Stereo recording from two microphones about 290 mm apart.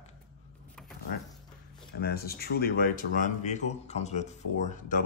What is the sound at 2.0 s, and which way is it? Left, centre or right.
Speech, left.